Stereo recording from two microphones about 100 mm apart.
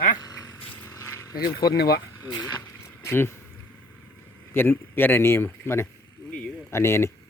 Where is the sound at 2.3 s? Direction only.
40° left (ahead or behind).